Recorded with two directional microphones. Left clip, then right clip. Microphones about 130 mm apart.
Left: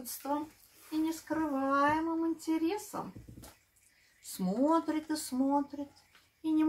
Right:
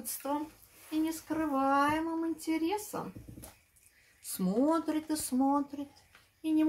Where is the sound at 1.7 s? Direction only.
30° right (ahead or behind).